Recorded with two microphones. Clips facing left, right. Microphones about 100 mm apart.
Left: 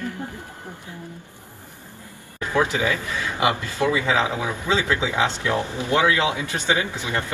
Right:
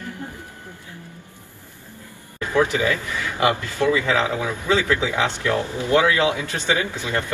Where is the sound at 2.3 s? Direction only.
20° left (ahead or behind).